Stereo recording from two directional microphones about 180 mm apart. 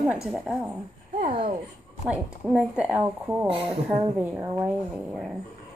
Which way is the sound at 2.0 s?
5° right (ahead or behind).